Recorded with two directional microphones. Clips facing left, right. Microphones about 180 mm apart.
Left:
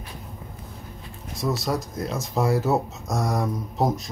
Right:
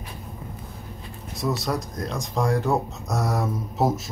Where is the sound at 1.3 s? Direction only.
Centre (ahead or behind).